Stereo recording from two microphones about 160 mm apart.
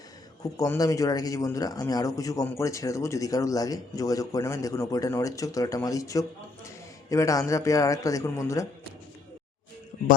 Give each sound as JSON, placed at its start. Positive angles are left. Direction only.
{"t": 0.5, "sound": "speech", "side_deg": 20}